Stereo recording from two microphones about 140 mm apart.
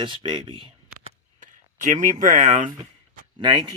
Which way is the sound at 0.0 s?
35° right (ahead or behind).